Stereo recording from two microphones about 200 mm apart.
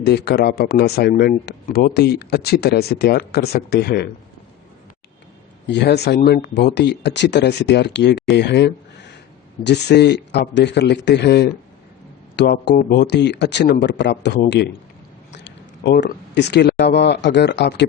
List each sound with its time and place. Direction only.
0.0 s speech: 55° left (ahead or behind)
5.6 s speech: 55° left (ahead or behind)